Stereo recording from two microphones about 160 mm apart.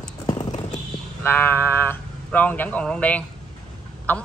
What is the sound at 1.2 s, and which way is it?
A woman's voice, 15° left (ahead or behind).